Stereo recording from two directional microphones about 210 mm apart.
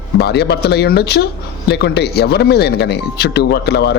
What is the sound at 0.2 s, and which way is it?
Speech, 50° left (ahead or behind).